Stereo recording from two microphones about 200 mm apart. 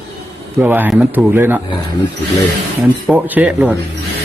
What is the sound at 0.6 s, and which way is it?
Speech, 10° right (ahead or behind).